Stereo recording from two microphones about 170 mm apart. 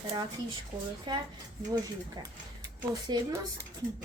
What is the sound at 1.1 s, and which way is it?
Speech, 25° right (ahead or behind).